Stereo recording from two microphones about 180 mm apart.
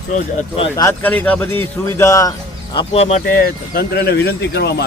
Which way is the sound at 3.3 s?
55° left (ahead or behind).